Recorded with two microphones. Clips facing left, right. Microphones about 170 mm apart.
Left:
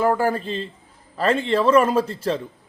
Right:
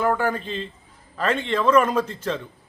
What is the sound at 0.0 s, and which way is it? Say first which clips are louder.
A man's voice: left 3 dB; 30° left (ahead or behind).